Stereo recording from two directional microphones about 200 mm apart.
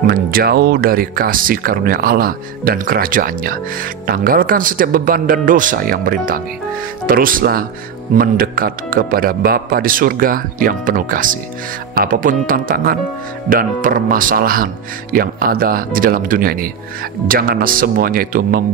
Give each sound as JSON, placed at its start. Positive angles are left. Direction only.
{"t": 0.0, "sound": "speech", "side_deg": -45}